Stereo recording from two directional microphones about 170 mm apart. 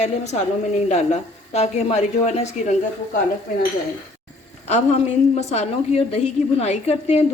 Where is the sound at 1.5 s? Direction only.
40° left (ahead or behind).